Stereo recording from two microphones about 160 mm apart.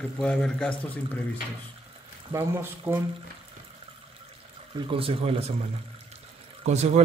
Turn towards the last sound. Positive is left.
turn(degrees=-45)  # may be behind; listen again after turning